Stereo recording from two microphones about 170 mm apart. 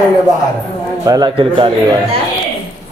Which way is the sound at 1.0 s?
25° right (ahead or behind).